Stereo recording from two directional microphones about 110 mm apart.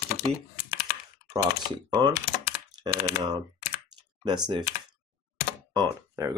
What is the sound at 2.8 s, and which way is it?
Typing, 45° right (ahead or behind).